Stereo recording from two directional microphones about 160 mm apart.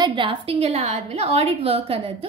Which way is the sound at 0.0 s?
30° right (ahead or behind).